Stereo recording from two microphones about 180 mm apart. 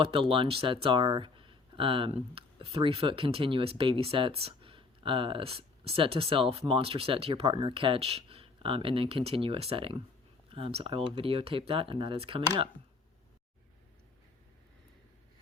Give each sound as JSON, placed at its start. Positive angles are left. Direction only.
{"t": 0.0, "sound": "speech", "side_deg": -30}